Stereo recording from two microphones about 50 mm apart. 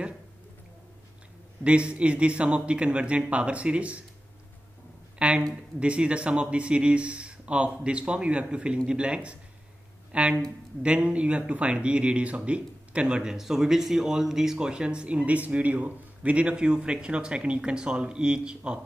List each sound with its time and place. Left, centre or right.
1.6 s speech: right
5.2 s speech: right